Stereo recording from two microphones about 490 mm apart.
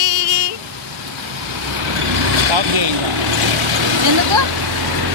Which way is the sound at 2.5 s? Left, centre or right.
Right.